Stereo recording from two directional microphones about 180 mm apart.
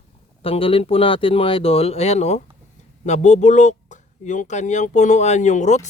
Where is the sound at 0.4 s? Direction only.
30° left (ahead or behind).